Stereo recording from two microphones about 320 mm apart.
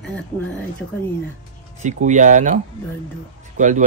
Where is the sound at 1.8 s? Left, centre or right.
Right.